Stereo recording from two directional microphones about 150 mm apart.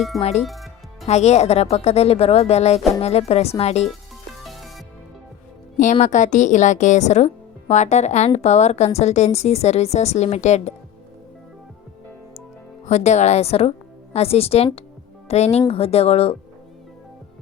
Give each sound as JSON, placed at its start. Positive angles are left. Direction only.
{"t": 0.2, "sound": "speech", "side_deg": 45}
{"t": 0.4, "sound": "music", "side_deg": 0}
{"t": 1.0, "sound": "speech", "side_deg": 45}
{"t": 4.4, "sound": "music", "side_deg": 0}
{"t": 5.7, "sound": "speech", "side_deg": 60}
{"t": 12.8, "sound": "speech", "side_deg": 50}